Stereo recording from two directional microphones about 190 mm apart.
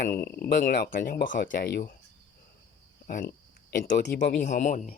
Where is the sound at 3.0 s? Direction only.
55° left (ahead or behind).